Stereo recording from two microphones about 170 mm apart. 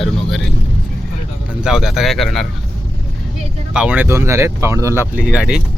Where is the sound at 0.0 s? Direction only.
Centre (ahead or behind).